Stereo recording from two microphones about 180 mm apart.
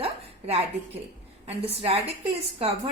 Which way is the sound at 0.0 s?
35° right (ahead or behind).